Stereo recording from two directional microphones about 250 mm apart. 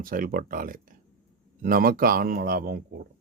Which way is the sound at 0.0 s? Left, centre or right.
Right.